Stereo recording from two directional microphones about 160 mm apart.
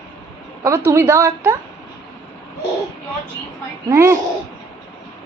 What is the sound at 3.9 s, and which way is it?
Speech, 15° right (ahead or behind).